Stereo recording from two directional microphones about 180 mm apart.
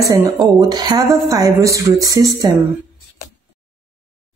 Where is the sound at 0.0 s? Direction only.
20° right (ahead or behind).